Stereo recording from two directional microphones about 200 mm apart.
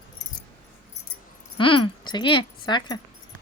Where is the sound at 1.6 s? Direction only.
25° left (ahead or behind).